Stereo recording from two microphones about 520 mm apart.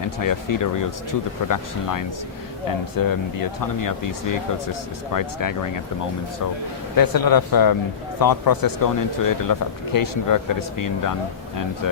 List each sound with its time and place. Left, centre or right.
0.2 s speech: left
6.9 s speech: left